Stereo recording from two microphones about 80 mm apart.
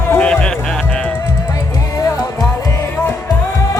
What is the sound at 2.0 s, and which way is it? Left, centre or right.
Music, left.